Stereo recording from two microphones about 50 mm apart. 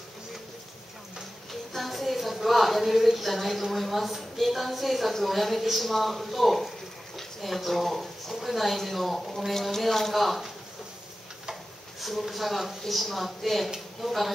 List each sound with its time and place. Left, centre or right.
1.5 s a woman's voice: centre
7.2 s a sound: centre
8.4 s speech: centre
12.0 s speech: centre